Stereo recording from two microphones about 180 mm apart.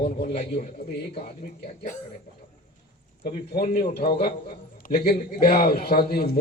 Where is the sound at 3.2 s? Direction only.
55° left (ahead or behind).